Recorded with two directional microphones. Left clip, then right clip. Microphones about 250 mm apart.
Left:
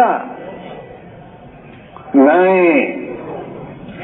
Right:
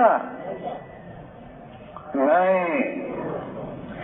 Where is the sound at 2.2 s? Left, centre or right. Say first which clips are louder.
Left 8 dB; left.